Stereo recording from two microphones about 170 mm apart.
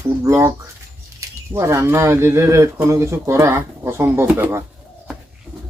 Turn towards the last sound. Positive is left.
turn(degrees=-15)  # may be behind; listen again after turning